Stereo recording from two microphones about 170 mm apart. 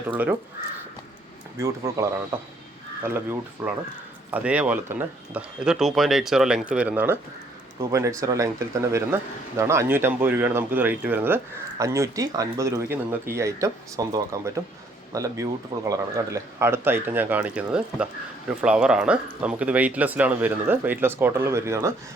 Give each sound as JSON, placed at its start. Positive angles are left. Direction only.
{"t": 1.5, "sound": "speech", "side_deg": -20}